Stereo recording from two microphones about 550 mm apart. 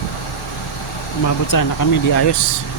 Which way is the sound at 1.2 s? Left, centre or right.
Left.